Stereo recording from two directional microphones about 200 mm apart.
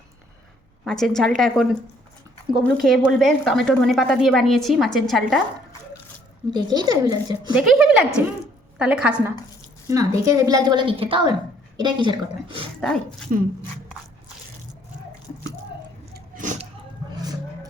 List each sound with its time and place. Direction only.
0.9 s a woman's voice: 5° left (ahead or behind)
2.6 s a woman's voice: centre (ahead or behind)
6.5 s a woman's voice: 20° right (ahead or behind)
7.5 s a woman's voice: 5° right (ahead or behind)
9.9 s a woman's voice: 15° right (ahead or behind)
12.8 s a woman's voice: 5° left (ahead or behind)
16.1 s a sound: 40° right (ahead or behind)
17.2 s vehicle: 20° right (ahead or behind)